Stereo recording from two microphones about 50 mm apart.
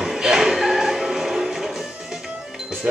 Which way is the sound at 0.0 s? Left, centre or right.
Centre.